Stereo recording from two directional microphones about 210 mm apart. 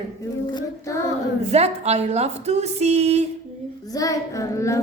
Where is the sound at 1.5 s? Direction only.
30° right (ahead or behind).